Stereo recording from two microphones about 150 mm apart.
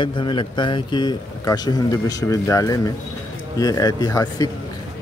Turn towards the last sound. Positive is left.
turn(degrees=25)  # may be behind; listen again after turning